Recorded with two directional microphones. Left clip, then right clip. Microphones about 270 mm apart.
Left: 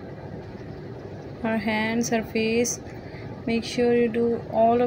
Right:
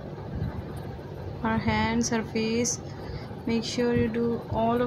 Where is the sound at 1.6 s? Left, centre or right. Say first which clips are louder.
Left 2 dB; right.